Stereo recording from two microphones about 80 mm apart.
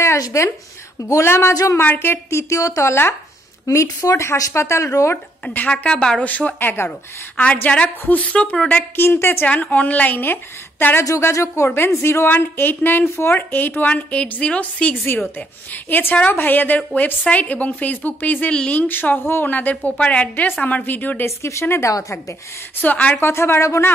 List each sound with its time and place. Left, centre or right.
0.2 s speech: left
1.5 s speech: left
1.8 s a woman's voice: left
2.2 s speech: left
5.1 s a woman's voice: left
9.5 s a woman's voice: centre
11.1 s a woman's voice: left
21.4 s speech: left
22.8 s a woman's voice: left
23.2 s speech: left